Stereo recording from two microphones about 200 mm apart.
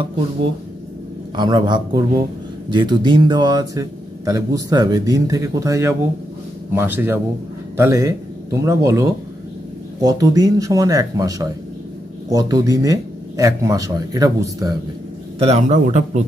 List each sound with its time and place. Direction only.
1.3 s speech: 20° right (ahead or behind)
10.0 s speech: 20° right (ahead or behind)
15.3 s speech: 30° right (ahead or behind)